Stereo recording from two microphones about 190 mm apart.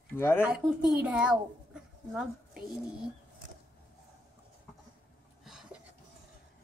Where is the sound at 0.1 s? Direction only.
10° left (ahead or behind).